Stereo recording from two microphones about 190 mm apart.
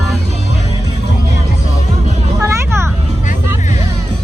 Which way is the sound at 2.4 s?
15° right (ahead or behind).